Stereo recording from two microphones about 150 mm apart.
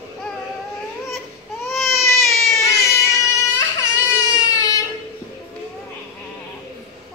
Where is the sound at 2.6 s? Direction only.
20° left (ahead or behind).